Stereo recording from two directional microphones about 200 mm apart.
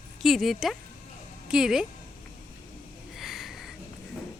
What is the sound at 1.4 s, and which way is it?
Speech, 5° right (ahead or behind).